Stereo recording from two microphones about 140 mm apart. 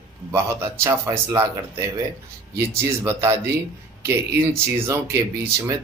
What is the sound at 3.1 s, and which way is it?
Speech, 20° right (ahead or behind).